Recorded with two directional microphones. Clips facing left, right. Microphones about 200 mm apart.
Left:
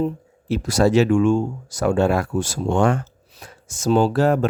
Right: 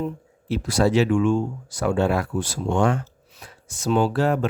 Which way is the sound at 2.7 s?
50° left (ahead or behind).